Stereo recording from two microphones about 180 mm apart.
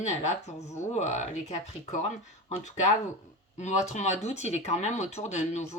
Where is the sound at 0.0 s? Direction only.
40° left (ahead or behind).